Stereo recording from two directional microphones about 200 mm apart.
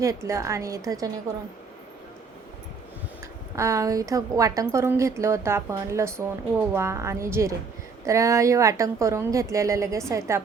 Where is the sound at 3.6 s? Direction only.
15° right (ahead or behind).